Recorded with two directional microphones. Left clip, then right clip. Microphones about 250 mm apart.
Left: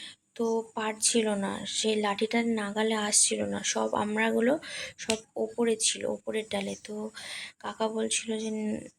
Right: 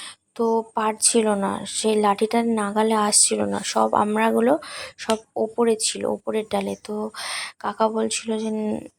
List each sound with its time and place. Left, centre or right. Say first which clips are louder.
0.3 s speech: right 8 dB; centre